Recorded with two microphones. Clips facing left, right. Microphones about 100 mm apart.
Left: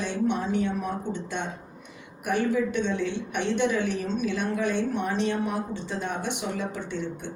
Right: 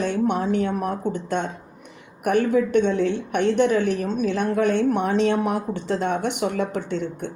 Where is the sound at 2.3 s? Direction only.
55° right (ahead or behind).